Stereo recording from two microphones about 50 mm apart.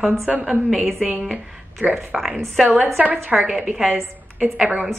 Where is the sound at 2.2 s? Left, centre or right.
Centre.